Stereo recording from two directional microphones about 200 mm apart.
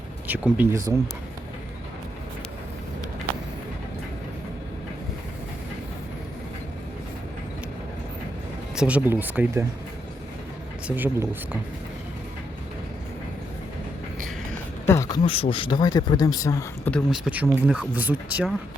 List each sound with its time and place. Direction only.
0.3 s speech: 10° right (ahead or behind)
8.7 s speech: 5° right (ahead or behind)
10.8 s speech: 10° right (ahead or behind)
14.8 s a sound: 15° left (ahead or behind)
15.2 s speech: 25° left (ahead or behind)
16.9 s speech: 5° right (ahead or behind)